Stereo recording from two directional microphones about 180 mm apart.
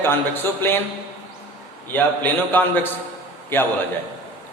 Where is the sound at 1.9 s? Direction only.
10° left (ahead or behind).